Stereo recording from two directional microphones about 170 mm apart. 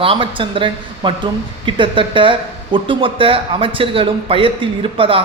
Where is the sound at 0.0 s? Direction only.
30° right (ahead or behind).